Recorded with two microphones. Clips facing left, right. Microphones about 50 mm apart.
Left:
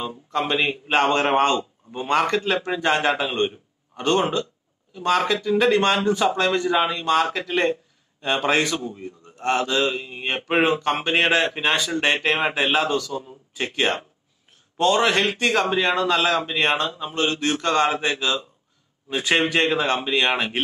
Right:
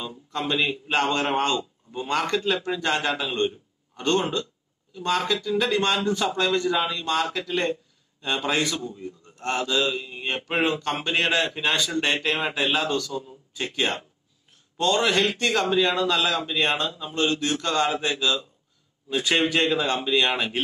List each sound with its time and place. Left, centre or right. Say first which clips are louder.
0.0 s a man's voice: left 5 dB; left
6.1 s a man's voice: left 3 dB; centre
15.6 s speech: left 1 dB; left
16.2 s speech: left 3 dB; left